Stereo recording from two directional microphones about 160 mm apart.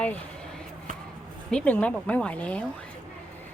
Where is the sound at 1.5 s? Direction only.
10° left (ahead or behind).